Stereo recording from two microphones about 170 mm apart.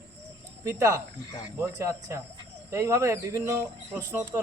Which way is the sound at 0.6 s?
20° right (ahead or behind).